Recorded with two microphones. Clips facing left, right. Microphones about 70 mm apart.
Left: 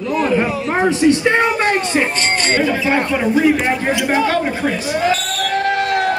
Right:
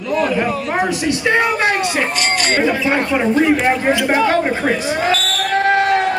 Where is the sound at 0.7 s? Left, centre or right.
Left.